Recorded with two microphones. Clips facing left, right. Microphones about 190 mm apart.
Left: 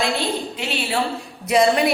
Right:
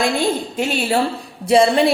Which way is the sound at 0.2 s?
45° right (ahead or behind).